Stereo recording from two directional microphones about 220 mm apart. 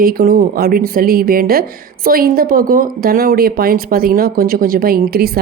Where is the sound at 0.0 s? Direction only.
40° right (ahead or behind).